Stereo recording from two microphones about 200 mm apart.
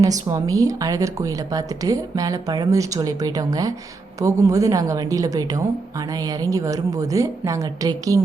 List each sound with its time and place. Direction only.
0.0 s a woman's voice: 15° right (ahead or behind)